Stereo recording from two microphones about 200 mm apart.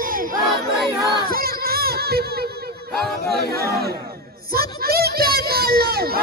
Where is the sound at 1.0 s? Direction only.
20° left (ahead or behind).